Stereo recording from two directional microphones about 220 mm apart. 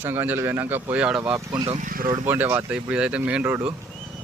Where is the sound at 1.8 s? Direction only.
40° right (ahead or behind).